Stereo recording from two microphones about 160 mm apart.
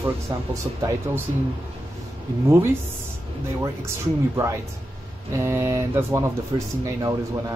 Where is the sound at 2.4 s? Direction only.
15° right (ahead or behind).